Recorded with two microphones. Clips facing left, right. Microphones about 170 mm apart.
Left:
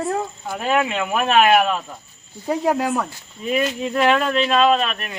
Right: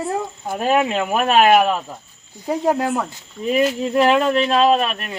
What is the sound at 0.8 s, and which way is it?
Speech, 35° right (ahead or behind).